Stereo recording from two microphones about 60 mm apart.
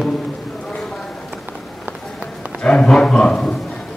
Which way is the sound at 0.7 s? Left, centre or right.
Centre.